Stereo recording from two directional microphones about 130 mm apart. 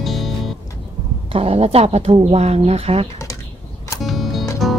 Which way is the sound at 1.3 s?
50° right (ahead or behind).